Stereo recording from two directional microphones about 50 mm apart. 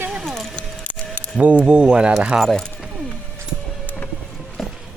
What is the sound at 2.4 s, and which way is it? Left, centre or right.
Speech, centre.